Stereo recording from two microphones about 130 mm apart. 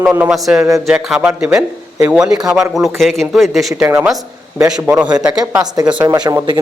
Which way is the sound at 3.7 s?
15° right (ahead or behind).